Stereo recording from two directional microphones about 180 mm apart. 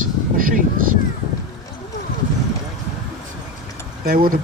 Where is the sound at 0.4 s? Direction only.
50° right (ahead or behind).